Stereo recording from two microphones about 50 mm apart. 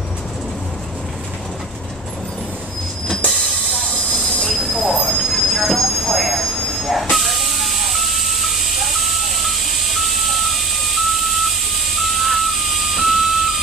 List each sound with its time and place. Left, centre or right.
3.2 s train: left
4.4 s train: centre